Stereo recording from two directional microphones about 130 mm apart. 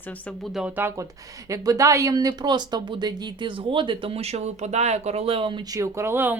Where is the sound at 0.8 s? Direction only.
20° right (ahead or behind); by 5.8 s 40° right (ahead or behind).